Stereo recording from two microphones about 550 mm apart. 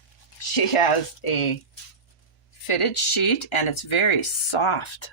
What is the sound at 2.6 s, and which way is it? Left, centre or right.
Speech, left.